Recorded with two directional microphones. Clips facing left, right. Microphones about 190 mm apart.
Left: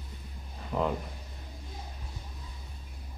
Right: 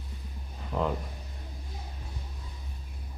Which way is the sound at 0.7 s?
Centre (ahead or behind).